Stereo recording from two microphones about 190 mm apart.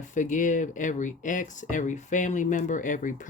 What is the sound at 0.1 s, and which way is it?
Speech, 40° left (ahead or behind).